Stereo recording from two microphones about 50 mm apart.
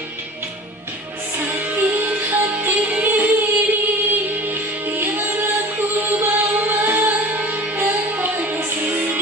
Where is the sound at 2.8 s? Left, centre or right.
Right.